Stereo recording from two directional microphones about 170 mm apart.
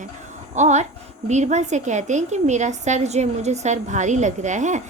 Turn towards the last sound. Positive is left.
turn(degrees=-45)  # may be behind; listen again after turning